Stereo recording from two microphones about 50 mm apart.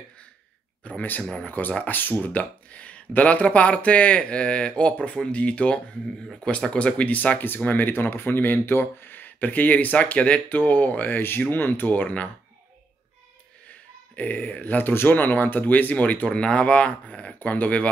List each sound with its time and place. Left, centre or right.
0.8 s speech: left
13.7 s speech: left